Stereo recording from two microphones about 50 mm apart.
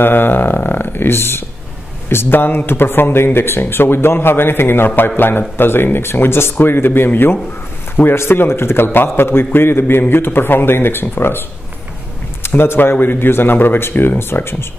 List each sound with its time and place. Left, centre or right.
0.0 s a sound: left
2.0 s a man's voice: left
12.4 s a man's voice: left